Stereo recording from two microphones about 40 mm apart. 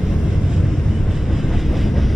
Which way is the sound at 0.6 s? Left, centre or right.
Centre.